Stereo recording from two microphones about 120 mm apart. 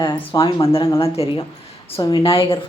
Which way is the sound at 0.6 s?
50° left (ahead or behind).